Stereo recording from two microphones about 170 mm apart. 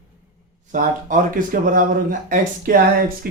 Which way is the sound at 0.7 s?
50° right (ahead or behind).